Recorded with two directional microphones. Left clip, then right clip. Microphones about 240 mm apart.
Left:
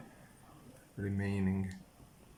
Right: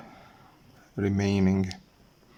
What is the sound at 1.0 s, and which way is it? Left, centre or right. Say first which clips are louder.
Speech: right 12 dB; right.